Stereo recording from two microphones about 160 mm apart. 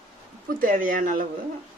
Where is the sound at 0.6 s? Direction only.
60° right (ahead or behind).